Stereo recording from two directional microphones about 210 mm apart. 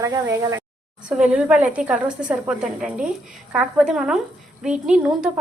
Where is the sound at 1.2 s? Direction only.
5° right (ahead or behind).